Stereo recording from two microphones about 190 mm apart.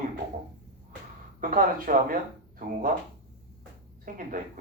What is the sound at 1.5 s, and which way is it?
Speech, 45° right (ahead or behind).